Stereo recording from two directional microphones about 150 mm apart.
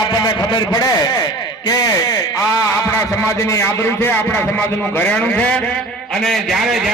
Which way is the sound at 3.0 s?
20° left (ahead or behind).